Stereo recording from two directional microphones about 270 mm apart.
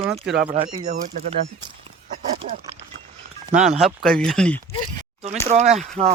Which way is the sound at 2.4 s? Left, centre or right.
Right.